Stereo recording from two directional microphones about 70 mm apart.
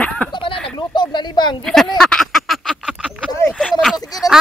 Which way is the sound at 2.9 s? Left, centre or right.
Centre.